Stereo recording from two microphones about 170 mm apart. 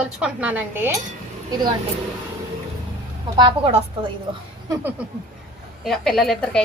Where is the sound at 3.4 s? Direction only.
30° right (ahead or behind).